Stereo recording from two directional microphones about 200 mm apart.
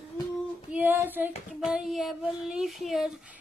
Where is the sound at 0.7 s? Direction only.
10° right (ahead or behind).